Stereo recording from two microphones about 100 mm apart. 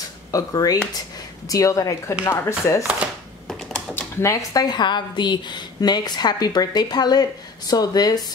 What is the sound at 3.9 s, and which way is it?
A woman's voice, 30° left (ahead or behind).